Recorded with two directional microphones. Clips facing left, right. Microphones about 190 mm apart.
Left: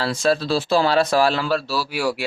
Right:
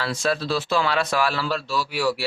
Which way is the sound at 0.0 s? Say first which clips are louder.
Left 4 dB; 30° left (ahead or behind).